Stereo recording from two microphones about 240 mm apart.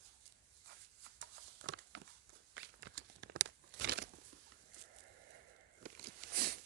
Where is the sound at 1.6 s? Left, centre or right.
Right.